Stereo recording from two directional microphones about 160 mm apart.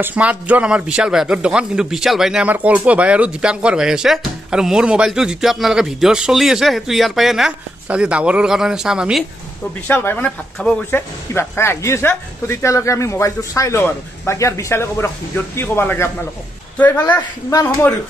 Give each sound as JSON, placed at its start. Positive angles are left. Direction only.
{"t": 0.0, "sound": "a man's voice", "side_deg": -10}
{"t": 9.8, "sound": "speech", "side_deg": 10}
{"t": 17.1, "sound": "a woman's voice", "side_deg": 20}